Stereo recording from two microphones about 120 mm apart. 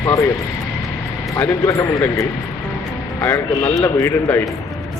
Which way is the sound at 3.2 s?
20° left (ahead or behind).